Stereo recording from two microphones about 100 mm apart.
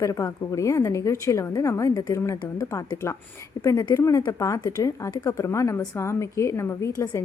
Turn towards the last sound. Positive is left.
turn(degrees=30)  # may be behind; listen again after turning